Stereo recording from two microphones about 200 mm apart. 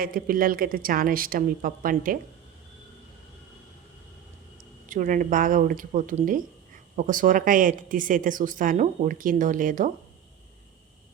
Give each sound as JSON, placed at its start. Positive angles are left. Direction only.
{"t": 0.0, "sound": "a woman's voice", "side_deg": -45}
{"t": 4.9, "sound": "a woman's voice", "side_deg": -45}